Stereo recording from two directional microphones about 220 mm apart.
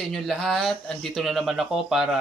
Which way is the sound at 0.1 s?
Centre (ahead or behind).